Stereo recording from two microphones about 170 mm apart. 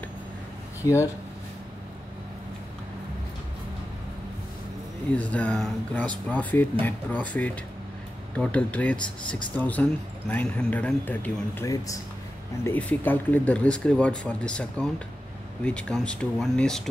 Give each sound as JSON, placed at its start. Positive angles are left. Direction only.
{"t": 0.8, "sound": "speech", "side_deg": 20}
{"t": 5.1, "sound": "speech", "side_deg": 10}